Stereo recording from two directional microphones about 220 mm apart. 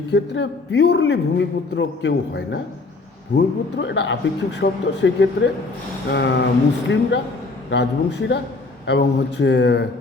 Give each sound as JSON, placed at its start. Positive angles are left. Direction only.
{"t": 0.1, "sound": "a man's voice", "side_deg": 50}
{"t": 8.9, "sound": "a man's voice", "side_deg": 50}